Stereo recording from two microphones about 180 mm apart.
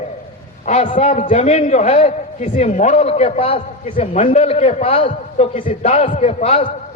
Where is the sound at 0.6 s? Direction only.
40° left (ahead or behind).